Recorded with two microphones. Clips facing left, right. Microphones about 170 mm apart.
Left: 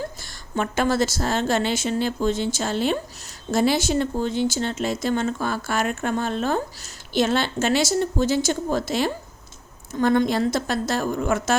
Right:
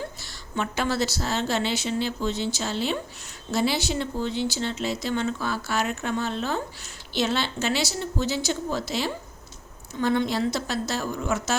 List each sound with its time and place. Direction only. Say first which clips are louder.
0.0 s speech: left 3 dB; 50° left (ahead or behind)